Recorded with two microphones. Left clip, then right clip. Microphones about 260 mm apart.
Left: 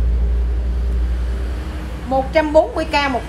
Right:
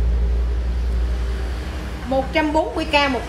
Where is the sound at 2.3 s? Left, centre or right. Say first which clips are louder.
Left 8 dB; centre.